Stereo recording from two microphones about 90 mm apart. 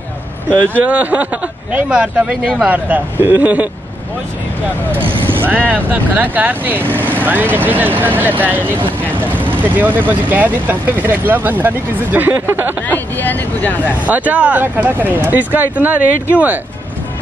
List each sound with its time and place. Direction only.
0.7 s speech: 15° right (ahead or behind)
5.0 s speech: 20° right (ahead or behind)
12.8 s speech: 20° left (ahead or behind)
13.9 s speech: 15° right (ahead or behind)